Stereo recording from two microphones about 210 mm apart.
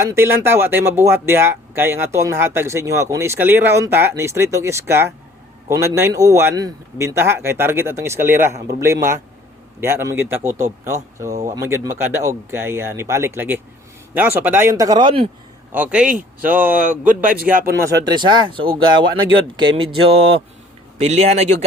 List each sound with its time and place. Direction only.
0.0 s speech: 15° right (ahead or behind)
15.7 s a man's voice: 5° right (ahead or behind)
17.8 s speech: 20° right (ahead or behind)